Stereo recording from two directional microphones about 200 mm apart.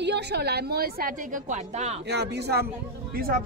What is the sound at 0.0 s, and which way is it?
Speech, 55° right (ahead or behind).